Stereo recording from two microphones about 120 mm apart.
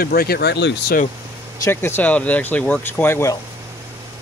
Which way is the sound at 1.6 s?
20° left (ahead or behind).